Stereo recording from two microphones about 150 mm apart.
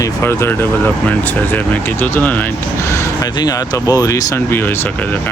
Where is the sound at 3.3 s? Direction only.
25° left (ahead or behind).